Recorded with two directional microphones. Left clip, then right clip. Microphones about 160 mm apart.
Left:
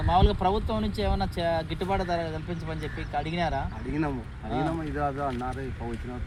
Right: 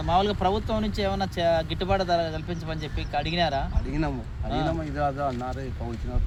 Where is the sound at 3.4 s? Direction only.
10° left (ahead or behind).